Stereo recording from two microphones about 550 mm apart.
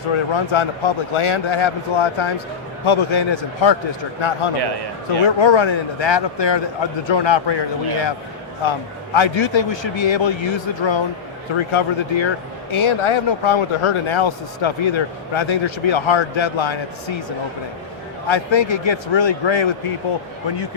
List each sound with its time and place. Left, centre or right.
0.1 s speech: left
4.5 s a man's voice: right
5.2 s a man's voice: left
18.3 s a man's voice: left